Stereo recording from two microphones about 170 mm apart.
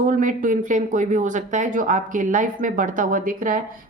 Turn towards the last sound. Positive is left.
turn(degrees=-55)  # may be behind; listen again after turning